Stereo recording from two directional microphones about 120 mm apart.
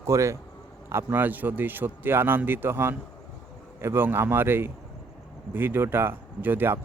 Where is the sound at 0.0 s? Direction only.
25° right (ahead or behind).